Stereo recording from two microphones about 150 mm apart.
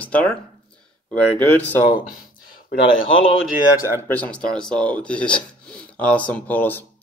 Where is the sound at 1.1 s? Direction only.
10° left (ahead or behind).